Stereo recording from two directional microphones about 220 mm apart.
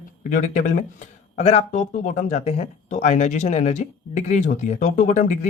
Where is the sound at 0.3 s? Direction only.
35° left (ahead or behind).